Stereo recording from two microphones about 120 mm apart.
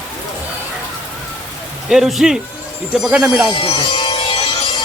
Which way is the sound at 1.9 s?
Centre (ahead or behind).